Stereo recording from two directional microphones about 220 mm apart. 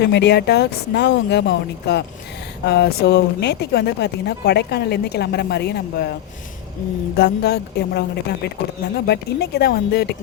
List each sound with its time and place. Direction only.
0.0 s speech: 50° left (ahead or behind)
7.2 s speech: 50° left (ahead or behind)